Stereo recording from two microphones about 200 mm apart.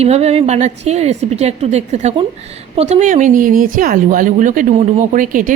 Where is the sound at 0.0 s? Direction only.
30° right (ahead or behind).